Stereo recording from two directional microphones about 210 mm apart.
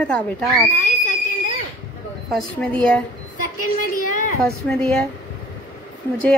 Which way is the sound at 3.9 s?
40° left (ahead or behind).